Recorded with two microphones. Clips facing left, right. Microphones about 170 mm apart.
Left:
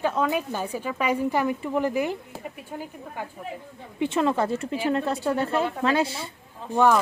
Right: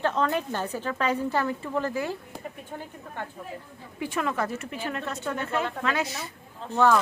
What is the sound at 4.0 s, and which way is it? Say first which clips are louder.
Speech: left 5 dB; 25° left (ahead or behind).